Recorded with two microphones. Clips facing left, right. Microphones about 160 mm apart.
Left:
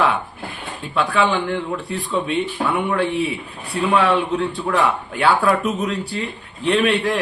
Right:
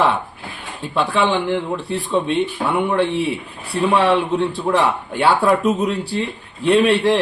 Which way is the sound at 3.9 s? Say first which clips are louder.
Right 1 dB; 30° right (ahead or behind).